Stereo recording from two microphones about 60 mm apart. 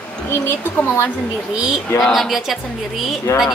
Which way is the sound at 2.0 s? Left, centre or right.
Centre.